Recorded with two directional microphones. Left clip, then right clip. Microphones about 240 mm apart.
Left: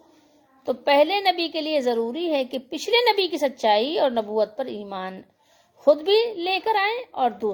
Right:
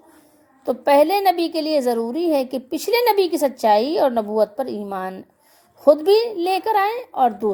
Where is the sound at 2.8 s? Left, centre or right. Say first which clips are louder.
Right 2 dB; centre.